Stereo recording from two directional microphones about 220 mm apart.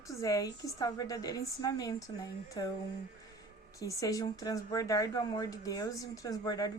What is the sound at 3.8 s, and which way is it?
Speech, 15° left (ahead or behind).